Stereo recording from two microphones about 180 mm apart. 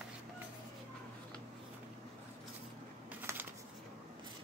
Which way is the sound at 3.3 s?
15° right (ahead or behind).